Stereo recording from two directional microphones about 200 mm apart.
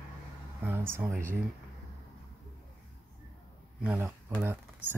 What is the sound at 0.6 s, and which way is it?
Speech, 10° right (ahead or behind).